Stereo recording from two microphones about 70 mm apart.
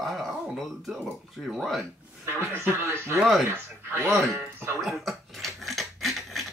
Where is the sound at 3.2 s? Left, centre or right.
Centre.